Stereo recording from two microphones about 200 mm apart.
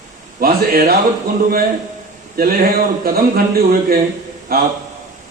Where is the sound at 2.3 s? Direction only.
50° right (ahead or behind).